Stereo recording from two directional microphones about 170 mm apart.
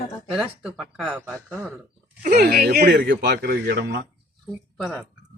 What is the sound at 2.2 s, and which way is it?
Speech, 50° right (ahead or behind).